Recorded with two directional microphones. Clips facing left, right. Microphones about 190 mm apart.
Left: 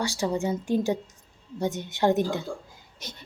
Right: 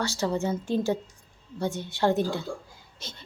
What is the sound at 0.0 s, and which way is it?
A woman's voice, 15° left (ahead or behind).